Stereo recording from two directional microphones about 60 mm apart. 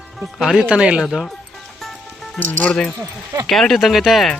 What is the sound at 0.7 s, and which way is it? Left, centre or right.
Speech, centre.